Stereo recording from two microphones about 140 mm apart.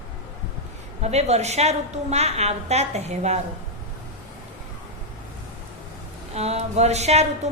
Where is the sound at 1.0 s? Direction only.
50° right (ahead or behind).